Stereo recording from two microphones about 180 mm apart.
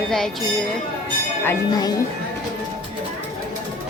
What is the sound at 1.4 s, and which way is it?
Speech, 20° left (ahead or behind).